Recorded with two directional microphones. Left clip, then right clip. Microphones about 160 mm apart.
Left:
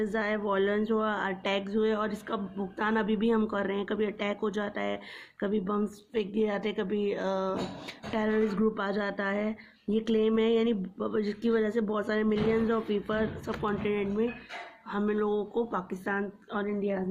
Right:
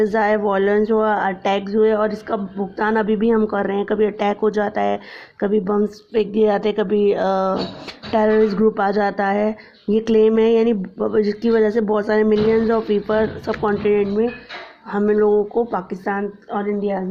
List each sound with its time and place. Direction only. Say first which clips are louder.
0.0 s speech: right 13 dB; 35° right (ahead or behind)